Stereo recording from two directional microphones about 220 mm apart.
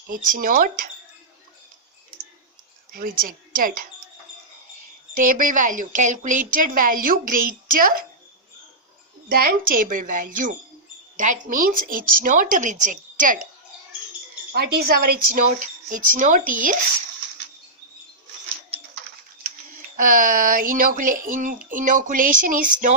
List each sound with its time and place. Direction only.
0.1 s speech: 40° right (ahead or behind)
2.9 s speech: 40° right (ahead or behind)
5.1 s speech: 35° right (ahead or behind)
9.3 s speech: 40° right (ahead or behind)
14.5 s speech: 45° right (ahead or behind)
20.0 s speech: 40° right (ahead or behind)